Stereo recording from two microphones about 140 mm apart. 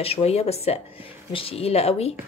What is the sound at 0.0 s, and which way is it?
Speech, 45° left (ahead or behind).